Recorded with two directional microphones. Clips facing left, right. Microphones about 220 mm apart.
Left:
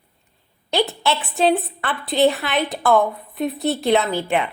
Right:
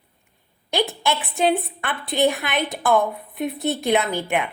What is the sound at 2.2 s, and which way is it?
Speech, 15° right (ahead or behind).